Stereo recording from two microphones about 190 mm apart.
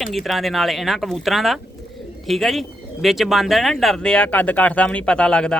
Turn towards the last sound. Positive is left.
turn(degrees=5)  # may be behind; listen again after turning